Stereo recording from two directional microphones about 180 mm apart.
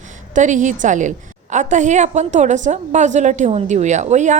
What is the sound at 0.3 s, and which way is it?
A woman's voice, 45° right (ahead or behind).